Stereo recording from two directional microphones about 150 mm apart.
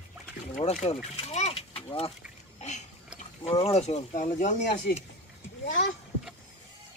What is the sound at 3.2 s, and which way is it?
Speech, 40° left (ahead or behind).